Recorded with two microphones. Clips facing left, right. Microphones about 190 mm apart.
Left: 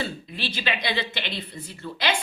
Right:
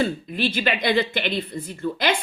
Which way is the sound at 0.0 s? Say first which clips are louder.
Right 8 dB; 50° right (ahead or behind).